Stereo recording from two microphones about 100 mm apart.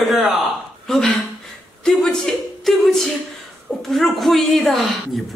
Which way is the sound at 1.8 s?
5° left (ahead or behind).